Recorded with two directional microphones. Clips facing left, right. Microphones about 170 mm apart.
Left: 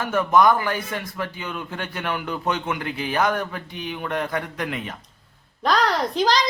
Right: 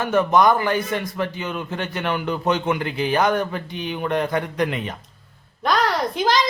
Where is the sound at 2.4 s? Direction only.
Centre (ahead or behind).